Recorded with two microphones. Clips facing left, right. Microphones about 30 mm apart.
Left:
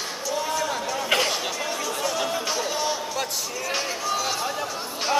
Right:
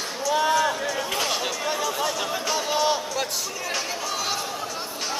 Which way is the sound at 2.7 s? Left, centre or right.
Right.